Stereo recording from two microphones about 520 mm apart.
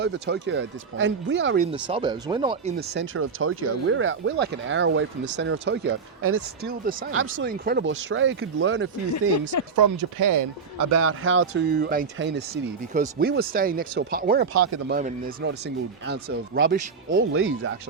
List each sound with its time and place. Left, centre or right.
0.0 s speech: centre
9.7 s speech: right